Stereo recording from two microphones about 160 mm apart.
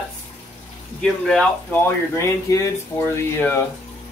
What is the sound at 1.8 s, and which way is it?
Speech, 20° left (ahead or behind).